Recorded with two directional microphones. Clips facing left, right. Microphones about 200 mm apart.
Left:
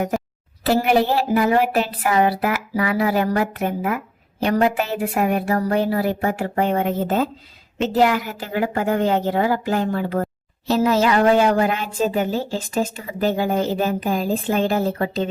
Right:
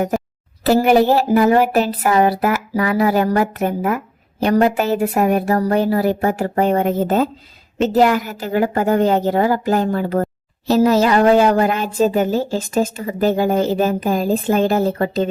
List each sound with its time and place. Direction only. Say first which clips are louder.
0.6 s a woman's voice: right 5 dB; 40° right (ahead or behind)